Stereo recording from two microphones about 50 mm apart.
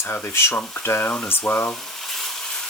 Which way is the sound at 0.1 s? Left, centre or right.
Left.